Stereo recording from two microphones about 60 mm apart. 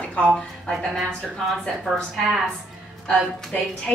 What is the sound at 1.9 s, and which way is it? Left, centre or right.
Speech, centre.